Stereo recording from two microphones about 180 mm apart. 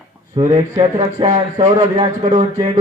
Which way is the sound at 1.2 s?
40° right (ahead or behind).